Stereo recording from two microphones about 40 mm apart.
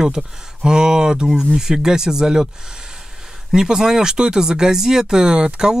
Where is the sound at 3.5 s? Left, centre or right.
Centre.